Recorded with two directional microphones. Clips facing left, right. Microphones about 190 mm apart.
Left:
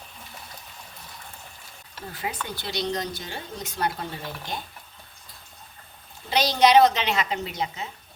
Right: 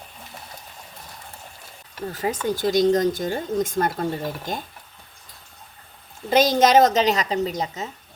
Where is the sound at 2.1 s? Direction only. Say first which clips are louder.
Right 8 dB; 40° right (ahead or behind).